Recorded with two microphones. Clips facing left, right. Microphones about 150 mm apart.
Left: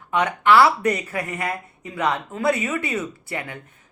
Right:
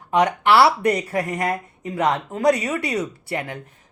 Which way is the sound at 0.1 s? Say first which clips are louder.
Right 1 dB; 35° right (ahead or behind).